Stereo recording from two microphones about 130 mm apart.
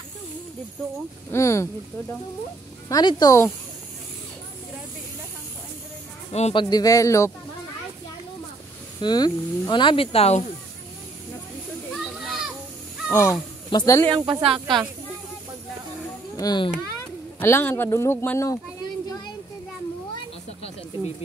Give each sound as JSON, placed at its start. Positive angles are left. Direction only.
{"t": 1.3, "sound": "speech", "side_deg": 20}
{"t": 2.9, "sound": "speech", "side_deg": 30}
{"t": 6.5, "sound": "speech", "side_deg": 35}
{"t": 9.0, "sound": "speech", "side_deg": 35}
{"t": 11.9, "sound": "children playing", "side_deg": -5}
{"t": 13.1, "sound": "speech", "side_deg": 20}
{"t": 13.7, "sound": "speech", "side_deg": 35}
{"t": 14.0, "sound": "speech", "side_deg": -40}
{"t": 16.3, "sound": "a child's voice", "side_deg": 35}
{"t": 17.4, "sound": "speech", "side_deg": 15}